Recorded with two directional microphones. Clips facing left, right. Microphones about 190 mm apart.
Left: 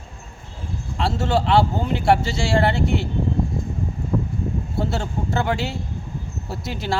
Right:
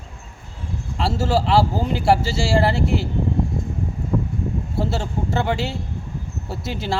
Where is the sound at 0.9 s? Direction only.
Centre (ahead or behind).